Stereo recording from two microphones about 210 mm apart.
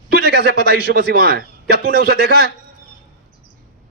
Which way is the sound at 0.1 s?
50° right (ahead or behind).